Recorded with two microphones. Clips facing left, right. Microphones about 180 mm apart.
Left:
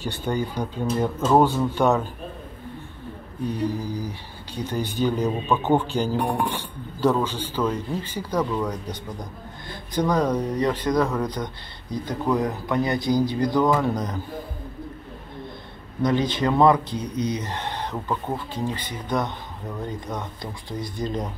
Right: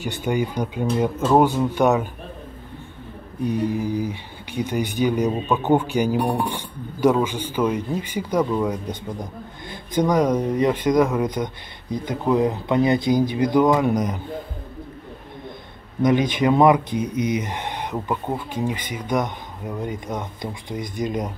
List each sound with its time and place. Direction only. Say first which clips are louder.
0.0 s speech: right 3 dB; 15° right (ahead or behind)
3.8 s speech: right 6 dB; 20° right (ahead or behind)
16.0 s speech: right 3 dB; 20° right (ahead or behind)